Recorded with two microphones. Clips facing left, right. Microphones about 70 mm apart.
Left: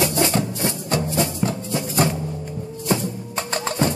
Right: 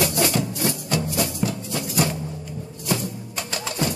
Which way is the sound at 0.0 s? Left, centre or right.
Left.